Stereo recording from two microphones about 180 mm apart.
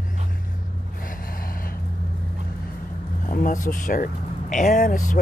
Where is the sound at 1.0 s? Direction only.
50° left (ahead or behind).